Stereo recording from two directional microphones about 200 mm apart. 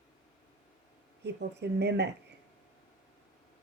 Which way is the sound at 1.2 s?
55° right (ahead or behind).